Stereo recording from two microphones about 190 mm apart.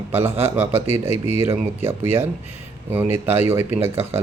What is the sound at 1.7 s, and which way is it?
Speech, 10° right (ahead or behind).